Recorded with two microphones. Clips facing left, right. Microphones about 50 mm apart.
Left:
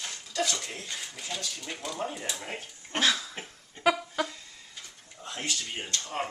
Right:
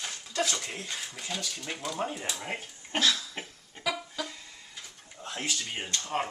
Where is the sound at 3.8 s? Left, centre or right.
Centre.